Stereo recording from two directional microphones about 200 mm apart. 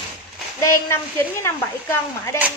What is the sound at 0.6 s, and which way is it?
A woman's voice, 10° left (ahead or behind).